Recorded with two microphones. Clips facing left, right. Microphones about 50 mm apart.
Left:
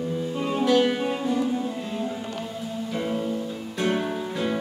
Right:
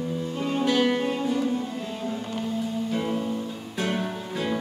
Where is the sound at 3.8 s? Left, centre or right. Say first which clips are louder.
Left 4 dB; centre.